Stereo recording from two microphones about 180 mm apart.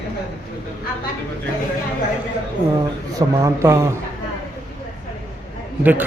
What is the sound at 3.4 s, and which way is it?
Speech, 15° right (ahead or behind).